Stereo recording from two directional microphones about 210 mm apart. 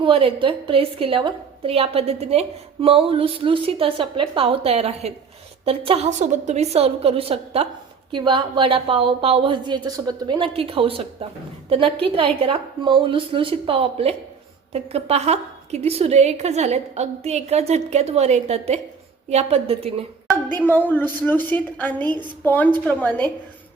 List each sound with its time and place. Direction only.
0.0 s a woman's voice: 25° right (ahead or behind)
20.2 s a woman's voice: 10° left (ahead or behind)